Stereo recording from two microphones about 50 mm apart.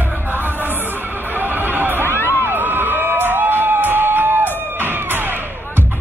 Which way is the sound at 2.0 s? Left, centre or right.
Left.